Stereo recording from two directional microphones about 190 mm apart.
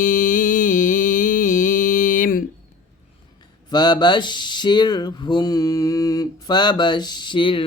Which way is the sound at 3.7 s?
20° left (ahead or behind).